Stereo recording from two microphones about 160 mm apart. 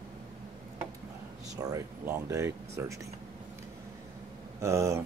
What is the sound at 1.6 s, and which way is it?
Speech, 20° right (ahead or behind).